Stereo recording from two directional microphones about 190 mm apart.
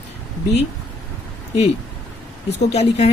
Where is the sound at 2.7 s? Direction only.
35° left (ahead or behind).